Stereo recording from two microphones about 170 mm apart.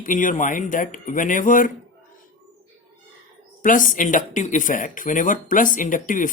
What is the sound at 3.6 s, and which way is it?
Speech, 50° left (ahead or behind).